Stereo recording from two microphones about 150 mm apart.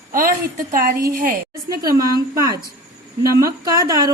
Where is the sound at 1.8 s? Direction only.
25° right (ahead or behind).